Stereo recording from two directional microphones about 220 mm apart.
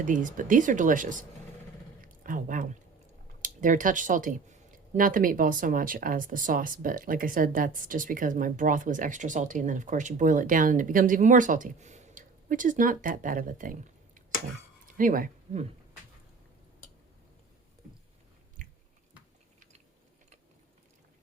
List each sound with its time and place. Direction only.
0.0 s speech: 35° right (ahead or behind)
2.0 s a sound: 35° right (ahead or behind)
3.4 s speech: 35° right (ahead or behind)
14.9 s speech: 40° right (ahead or behind)